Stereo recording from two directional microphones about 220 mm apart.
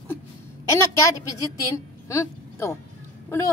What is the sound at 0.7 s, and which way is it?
A woman's voice, 15° left (ahead or behind).